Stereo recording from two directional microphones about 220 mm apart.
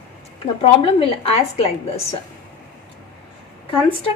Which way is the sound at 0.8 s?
25° left (ahead or behind).